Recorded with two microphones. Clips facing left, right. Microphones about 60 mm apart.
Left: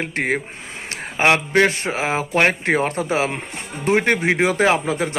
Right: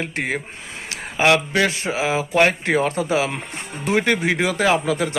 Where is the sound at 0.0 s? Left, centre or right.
Left.